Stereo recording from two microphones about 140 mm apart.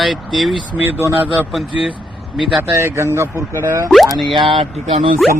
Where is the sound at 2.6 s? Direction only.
15° right (ahead or behind).